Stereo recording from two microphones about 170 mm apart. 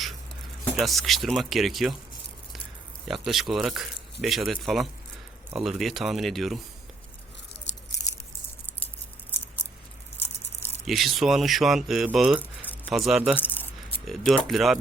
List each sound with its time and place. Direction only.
0.8 s speech: centre (ahead or behind)
3.1 s speech: centre (ahead or behind)
7.7 s crunch: 90° left
10.8 s speech: centre (ahead or behind)
12.4 s rattle: 10° left (ahead or behind)
12.8 s speech: centre (ahead or behind)
13.4 s keys jangling: 10° left (ahead or behind)
14.1 s speech: centre (ahead or behind)